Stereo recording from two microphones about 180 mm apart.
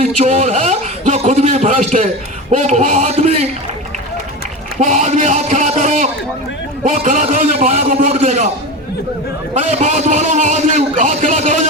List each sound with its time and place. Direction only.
0.0 s a man's voice: 40° right (ahead or behind)
4.8 s a man's voice: 40° right (ahead or behind)
9.6 s a man's voice: 40° right (ahead or behind)